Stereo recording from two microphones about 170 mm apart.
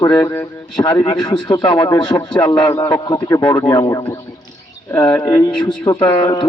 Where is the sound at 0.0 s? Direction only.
20° left (ahead or behind).